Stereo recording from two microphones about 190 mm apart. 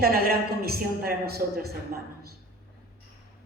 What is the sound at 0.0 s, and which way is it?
A man's voice, 55° right (ahead or behind).